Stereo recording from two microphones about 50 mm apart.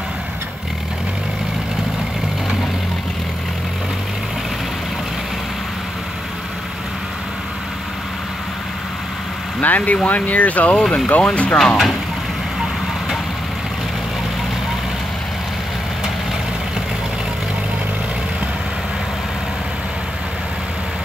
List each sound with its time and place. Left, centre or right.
9.6 s speech: left
11.5 s speech: centre